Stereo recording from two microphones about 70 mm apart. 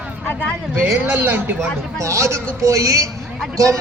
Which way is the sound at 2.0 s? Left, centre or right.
Right.